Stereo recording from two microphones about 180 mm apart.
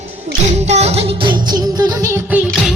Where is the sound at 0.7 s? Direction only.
35° right (ahead or behind).